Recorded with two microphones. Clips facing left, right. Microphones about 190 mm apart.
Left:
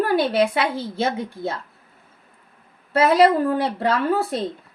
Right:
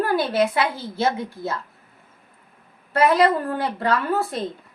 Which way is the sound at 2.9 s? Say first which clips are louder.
Left 2 dB; 30° left (ahead or behind).